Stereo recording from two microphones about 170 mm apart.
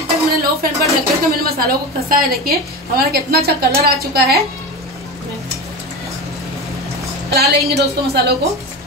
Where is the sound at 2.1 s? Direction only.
60° right (ahead or behind).